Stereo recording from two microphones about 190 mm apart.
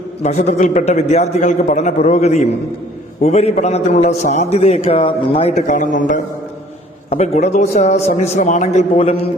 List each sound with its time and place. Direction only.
0.2 s a man's voice: 35° left (ahead or behind)